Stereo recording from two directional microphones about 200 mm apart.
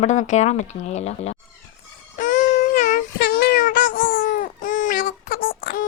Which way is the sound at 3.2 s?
55° left (ahead or behind).